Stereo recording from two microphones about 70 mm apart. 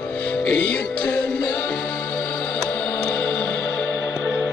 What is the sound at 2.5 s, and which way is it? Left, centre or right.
Music, left.